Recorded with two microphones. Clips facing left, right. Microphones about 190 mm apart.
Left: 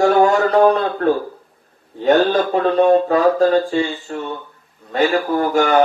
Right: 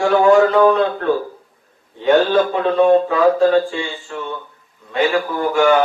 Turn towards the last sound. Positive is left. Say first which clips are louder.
# right 1 dB
turn(degrees=40)  # may be behind; listen again after turning